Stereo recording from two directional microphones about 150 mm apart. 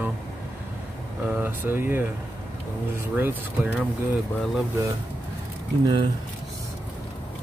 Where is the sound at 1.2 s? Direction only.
15° right (ahead or behind).